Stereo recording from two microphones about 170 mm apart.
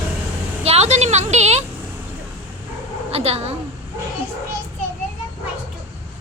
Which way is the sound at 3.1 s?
35° right (ahead or behind).